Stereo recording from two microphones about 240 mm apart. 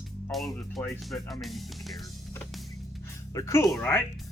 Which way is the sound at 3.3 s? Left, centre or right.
Centre.